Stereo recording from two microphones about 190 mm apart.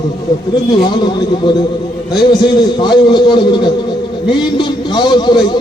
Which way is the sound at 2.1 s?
25° left (ahead or behind).